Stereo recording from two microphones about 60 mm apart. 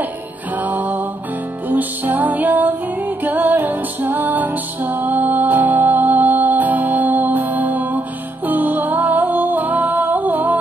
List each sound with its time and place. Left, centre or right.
0.6 s music: right